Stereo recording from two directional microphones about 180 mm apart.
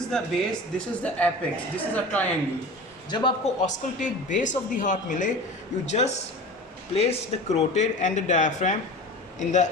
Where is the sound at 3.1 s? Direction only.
25° left (ahead or behind).